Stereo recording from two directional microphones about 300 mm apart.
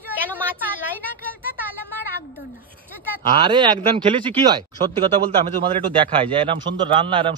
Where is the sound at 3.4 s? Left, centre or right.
Centre.